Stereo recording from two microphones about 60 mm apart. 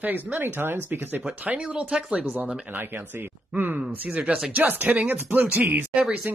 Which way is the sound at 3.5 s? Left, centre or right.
Right.